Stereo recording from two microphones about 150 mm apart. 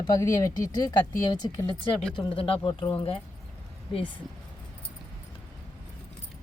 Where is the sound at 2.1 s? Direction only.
35° left (ahead or behind).